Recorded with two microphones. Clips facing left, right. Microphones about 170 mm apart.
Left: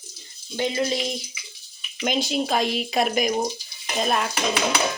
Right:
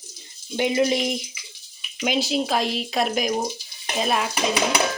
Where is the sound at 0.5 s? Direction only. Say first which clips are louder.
Right 4 dB; 15° right (ahead or behind).